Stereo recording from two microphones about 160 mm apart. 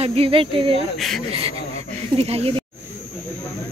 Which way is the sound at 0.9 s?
Centre (ahead or behind).